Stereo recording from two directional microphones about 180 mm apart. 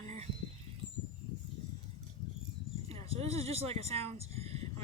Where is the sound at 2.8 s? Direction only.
35° right (ahead or behind).